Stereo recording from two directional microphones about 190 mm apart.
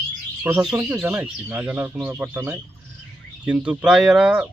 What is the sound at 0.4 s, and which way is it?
A man's voice, 5° right (ahead or behind).